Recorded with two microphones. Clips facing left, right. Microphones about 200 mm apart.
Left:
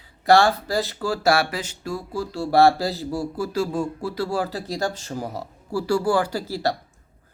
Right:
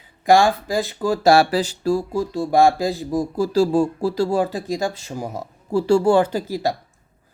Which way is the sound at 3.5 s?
30° right (ahead or behind).